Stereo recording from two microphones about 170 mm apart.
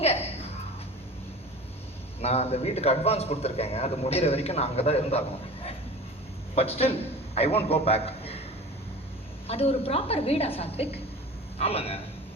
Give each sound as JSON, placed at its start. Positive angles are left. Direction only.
{"t": 0.0, "sound": "a sound", "side_deg": 35}
{"t": 2.2, "sound": "a man's voice", "side_deg": 35}
{"t": 6.5, "sound": "a man's voice", "side_deg": 35}
{"t": 9.5, "sound": "a man's voice", "side_deg": 35}